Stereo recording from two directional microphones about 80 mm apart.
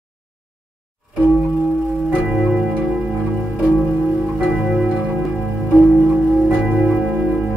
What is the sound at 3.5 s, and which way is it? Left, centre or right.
Music, centre.